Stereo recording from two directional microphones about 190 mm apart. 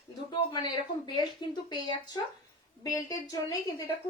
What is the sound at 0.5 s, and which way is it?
Speech, 25° left (ahead or behind).